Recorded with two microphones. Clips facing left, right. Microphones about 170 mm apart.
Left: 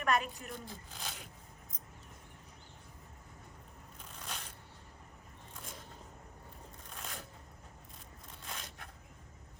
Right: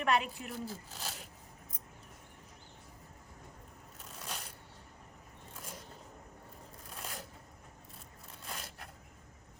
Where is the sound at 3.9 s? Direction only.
5° right (ahead or behind).